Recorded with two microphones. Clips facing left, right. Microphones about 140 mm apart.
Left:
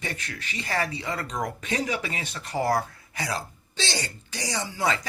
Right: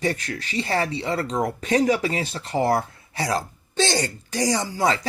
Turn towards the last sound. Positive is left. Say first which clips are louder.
# right 5 dB
turn(degrees=-40)  # may be behind; listen again after turning